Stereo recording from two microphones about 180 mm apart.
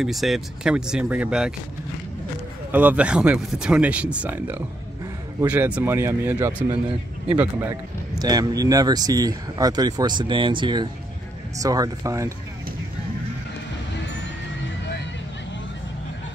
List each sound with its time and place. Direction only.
0.0 s speech: centre (ahead or behind)
2.7 s speech: 10° right (ahead or behind)
8.2 s speech: 20° right (ahead or behind)